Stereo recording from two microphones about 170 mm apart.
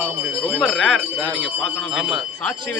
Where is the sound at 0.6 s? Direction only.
5° left (ahead or behind).